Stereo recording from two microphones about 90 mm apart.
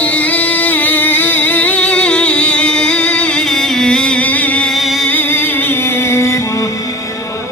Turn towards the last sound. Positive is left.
turn(degrees=35)  # may be behind; listen again after turning